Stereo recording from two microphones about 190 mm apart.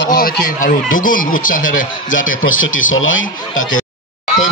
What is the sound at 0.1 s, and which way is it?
Speech, 45° left (ahead or behind).